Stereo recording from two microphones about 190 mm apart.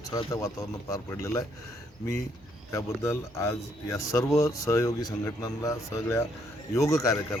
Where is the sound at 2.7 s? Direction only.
15° left (ahead or behind).